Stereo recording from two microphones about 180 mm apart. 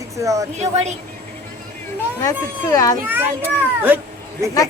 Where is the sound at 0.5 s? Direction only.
40° right (ahead or behind).